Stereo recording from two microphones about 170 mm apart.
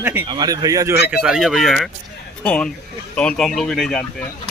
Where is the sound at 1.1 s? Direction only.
5° right (ahead or behind).